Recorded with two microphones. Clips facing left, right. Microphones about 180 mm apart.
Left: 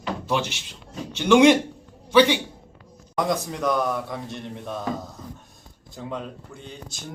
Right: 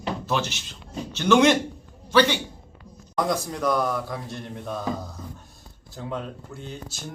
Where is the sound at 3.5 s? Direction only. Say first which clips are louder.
Even; centre (ahead or behind).